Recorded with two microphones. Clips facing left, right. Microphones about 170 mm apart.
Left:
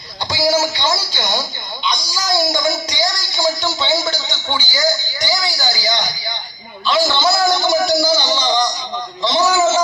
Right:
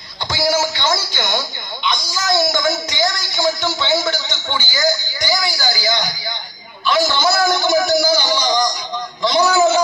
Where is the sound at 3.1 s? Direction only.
20° right (ahead or behind).